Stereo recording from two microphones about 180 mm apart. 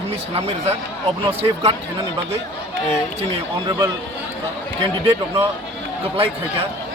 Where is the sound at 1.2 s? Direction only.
35° right (ahead or behind).